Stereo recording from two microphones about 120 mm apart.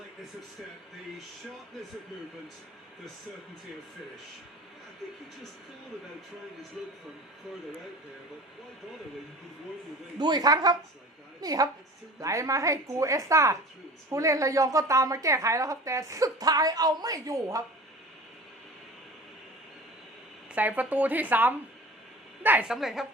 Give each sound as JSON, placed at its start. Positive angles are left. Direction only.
{"t": 6.8, "sound": "a woman's voice", "side_deg": -5}
{"t": 10.2, "sound": "a man's voice", "side_deg": -35}
{"t": 20.5, "sound": "a woman's voice", "side_deg": -15}